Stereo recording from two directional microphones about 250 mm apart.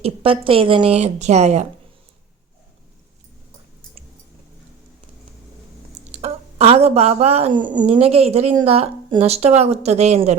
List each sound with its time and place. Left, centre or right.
0.0 s speech: right
6.1 s speech: right